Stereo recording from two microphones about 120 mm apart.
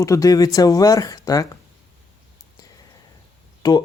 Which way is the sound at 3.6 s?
35° left (ahead or behind).